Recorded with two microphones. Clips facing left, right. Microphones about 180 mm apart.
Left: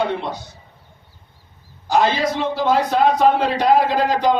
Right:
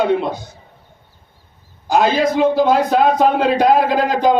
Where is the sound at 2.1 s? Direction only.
50° right (ahead or behind).